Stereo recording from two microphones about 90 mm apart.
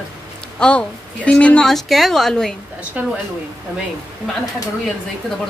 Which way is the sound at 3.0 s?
15° right (ahead or behind).